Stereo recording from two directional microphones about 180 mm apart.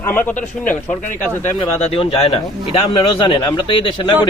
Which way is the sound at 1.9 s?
30° left (ahead or behind).